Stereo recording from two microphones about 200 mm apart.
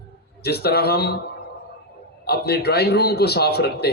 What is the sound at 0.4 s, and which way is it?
Speech, 50° left (ahead or behind).